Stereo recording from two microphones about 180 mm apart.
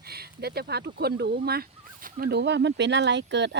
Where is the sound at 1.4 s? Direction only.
55° right (ahead or behind).